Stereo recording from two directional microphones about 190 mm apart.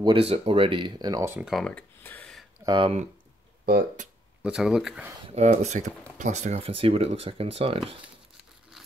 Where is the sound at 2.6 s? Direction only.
25° right (ahead or behind).